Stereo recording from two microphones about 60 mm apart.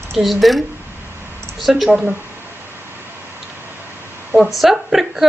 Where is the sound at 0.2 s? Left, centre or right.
Centre.